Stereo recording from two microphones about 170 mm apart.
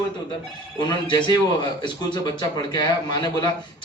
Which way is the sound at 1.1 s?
25° left (ahead or behind).